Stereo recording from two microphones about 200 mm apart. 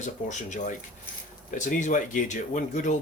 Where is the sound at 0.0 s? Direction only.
35° left (ahead or behind).